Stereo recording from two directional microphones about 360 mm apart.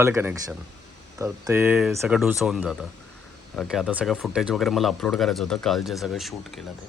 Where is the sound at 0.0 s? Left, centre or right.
Centre.